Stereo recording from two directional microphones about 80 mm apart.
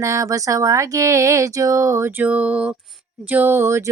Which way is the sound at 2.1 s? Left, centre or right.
Right.